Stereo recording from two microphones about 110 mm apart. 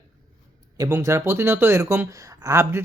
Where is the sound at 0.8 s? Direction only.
30° right (ahead or behind).